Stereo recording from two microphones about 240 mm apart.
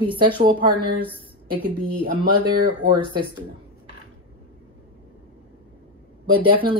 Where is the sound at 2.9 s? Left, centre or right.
Centre.